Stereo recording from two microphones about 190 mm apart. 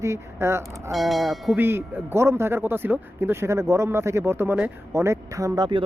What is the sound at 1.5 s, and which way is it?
Speech, 10° right (ahead or behind).